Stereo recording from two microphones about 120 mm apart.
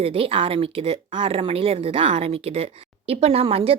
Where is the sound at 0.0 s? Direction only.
50° right (ahead or behind).